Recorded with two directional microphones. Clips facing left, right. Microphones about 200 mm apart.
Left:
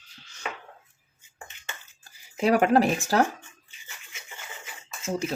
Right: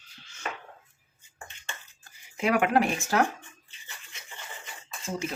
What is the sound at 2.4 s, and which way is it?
Speech, 35° left (ahead or behind).